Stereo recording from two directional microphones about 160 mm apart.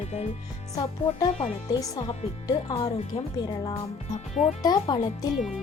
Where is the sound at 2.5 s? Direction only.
25° left (ahead or behind).